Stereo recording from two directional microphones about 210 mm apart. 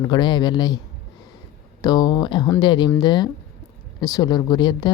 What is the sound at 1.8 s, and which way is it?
Speech, 20° left (ahead or behind).